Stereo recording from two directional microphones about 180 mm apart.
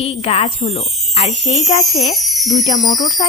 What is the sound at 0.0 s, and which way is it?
Speech, 35° left (ahead or behind).